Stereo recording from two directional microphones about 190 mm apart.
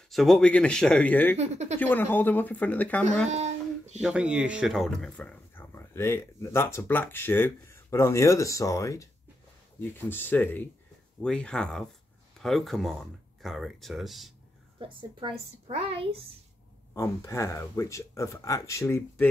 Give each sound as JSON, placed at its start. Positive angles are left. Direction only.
{"t": 0.1, "sound": "speech", "side_deg": 0}
{"t": 1.3, "sound": "speech", "side_deg": -35}
{"t": 1.8, "sound": "speech", "side_deg": 10}
{"t": 3.3, "sound": "a sound", "side_deg": -35}
{"t": 4.0, "sound": "speech", "side_deg": -5}
{"t": 14.8, "sound": "a woman's voice", "side_deg": -25}
{"t": 16.9, "sound": "speech", "side_deg": 15}